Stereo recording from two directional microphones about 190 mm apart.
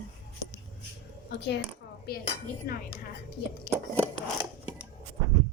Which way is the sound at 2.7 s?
55° left (ahead or behind).